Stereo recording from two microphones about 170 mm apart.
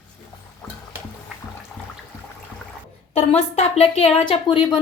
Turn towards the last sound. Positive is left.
turn(degrees=30)  # may be behind; listen again after turning